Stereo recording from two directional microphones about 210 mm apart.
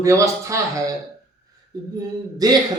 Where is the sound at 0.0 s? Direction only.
15° right (ahead or behind).